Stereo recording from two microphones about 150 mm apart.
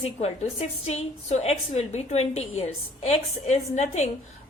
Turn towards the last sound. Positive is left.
turn(degrees=45)  # may be behind; listen again after turning